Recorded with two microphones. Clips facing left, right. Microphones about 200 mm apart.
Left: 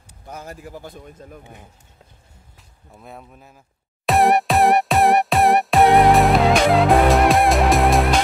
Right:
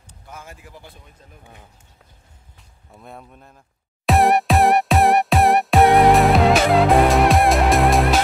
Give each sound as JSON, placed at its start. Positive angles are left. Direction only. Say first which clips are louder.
{"t": 0.3, "sound": "a man's voice", "louder": "left 6 dB", "side_deg": 40}
{"t": 2.9, "sound": "speech", "louder": "even", "side_deg": 0}
{"t": 4.0, "sound": "music", "louder": "even", "side_deg": 0}